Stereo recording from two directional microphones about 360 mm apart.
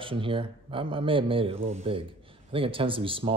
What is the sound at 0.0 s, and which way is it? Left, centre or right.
Speech, centre.